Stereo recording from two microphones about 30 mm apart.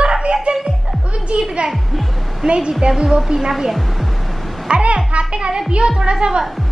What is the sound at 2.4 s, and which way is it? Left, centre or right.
A woman's voice, centre.